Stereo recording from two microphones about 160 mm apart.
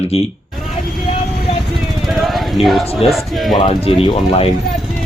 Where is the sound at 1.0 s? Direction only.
40° left (ahead or behind).